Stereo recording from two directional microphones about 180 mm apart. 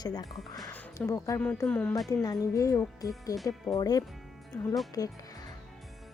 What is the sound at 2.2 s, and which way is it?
Speech, 20° left (ahead or behind).